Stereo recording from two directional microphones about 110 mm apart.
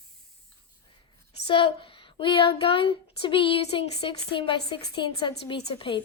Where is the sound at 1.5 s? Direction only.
50° left (ahead or behind).